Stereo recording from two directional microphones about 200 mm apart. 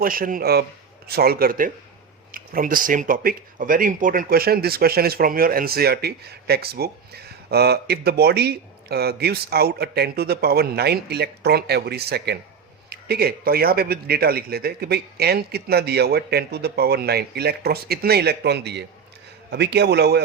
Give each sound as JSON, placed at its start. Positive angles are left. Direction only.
{"t": 0.0, "sound": "a man's voice", "side_deg": -45}